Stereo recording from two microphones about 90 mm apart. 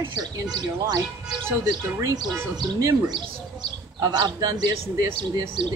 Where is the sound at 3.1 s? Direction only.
50° right (ahead or behind).